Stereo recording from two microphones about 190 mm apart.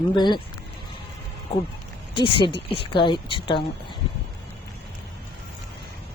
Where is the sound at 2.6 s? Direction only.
30° left (ahead or behind).